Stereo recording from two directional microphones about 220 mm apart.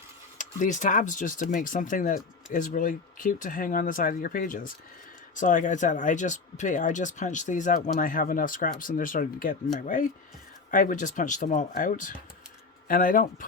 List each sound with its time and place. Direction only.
0.3 s speech: 35° left (ahead or behind)